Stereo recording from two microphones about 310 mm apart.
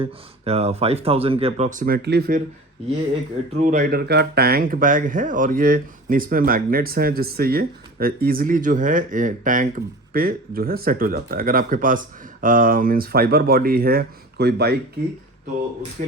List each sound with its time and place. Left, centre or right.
0.0 s speech: centre
3.6 s speech: right
16.0 s speech: right